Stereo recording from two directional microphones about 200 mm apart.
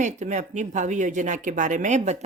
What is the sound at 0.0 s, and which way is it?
Speech, 35° right (ahead or behind).